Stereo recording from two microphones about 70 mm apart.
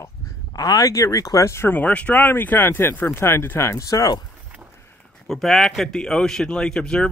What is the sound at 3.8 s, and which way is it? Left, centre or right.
Speech, left.